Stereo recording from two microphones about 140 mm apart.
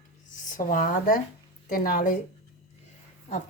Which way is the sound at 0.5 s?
70° left (ahead or behind).